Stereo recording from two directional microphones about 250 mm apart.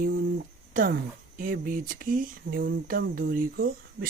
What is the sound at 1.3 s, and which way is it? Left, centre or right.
Speech, right.